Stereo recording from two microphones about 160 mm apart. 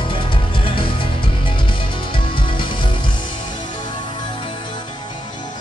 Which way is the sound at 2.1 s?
30° left (ahead or behind).